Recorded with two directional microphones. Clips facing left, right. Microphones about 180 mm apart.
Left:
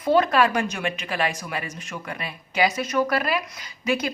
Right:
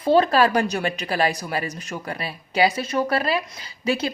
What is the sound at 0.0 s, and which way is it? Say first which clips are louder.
Speech: right 2 dB; 30° right (ahead or behind).